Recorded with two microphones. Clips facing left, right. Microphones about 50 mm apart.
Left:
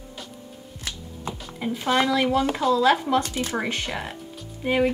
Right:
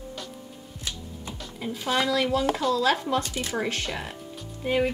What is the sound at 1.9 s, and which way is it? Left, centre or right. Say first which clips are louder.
Speech: left 3 dB; left.